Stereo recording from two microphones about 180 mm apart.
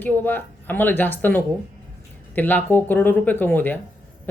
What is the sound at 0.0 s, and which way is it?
A woman's voice, 10° left (ahead or behind).